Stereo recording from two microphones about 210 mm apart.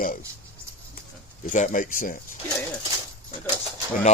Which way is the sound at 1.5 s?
40° left (ahead or behind).